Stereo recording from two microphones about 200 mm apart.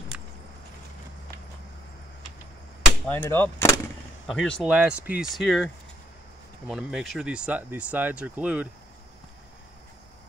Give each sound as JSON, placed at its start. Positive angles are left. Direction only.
{"t": 0.1, "sound": "vehicle", "side_deg": -5}
{"t": 3.1, "sound": "speech", "side_deg": 10}
{"t": 4.7, "sound": "speech", "side_deg": -5}
{"t": 6.7, "sound": "speech", "side_deg": 0}